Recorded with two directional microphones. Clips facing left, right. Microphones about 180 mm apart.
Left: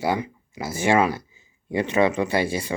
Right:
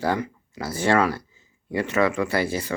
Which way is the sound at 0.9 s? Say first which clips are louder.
Left 1 dB; 20° left (ahead or behind).